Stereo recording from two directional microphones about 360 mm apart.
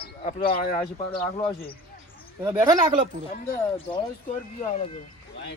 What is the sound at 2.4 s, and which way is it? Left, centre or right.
Speech, centre.